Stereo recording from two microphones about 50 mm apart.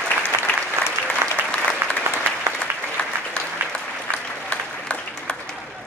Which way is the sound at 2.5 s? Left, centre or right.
Right.